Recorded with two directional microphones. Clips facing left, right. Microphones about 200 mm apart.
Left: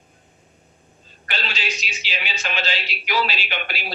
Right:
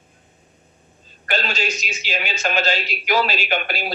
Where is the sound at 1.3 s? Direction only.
45° right (ahead or behind).